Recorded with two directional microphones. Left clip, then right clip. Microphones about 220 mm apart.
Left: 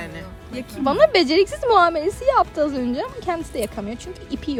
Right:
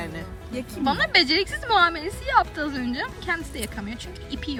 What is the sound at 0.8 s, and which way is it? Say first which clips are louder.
Speech: left 5 dB; 20° left (ahead or behind).